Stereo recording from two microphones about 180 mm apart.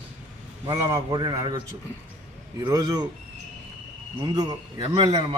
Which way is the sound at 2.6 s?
20° right (ahead or behind).